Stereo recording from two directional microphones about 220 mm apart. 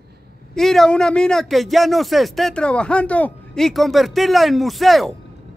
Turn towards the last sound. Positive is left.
turn(degrees=0)  # may be behind; listen again after turning